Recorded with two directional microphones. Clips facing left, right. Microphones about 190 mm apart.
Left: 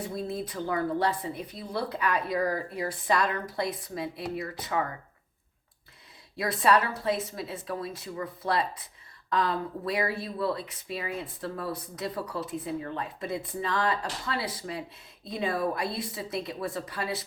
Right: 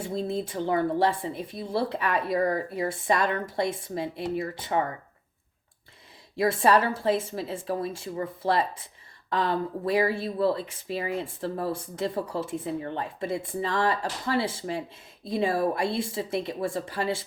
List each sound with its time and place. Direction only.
0.0 s speech: 25° right (ahead or behind)
6.3 s speech: 25° right (ahead or behind)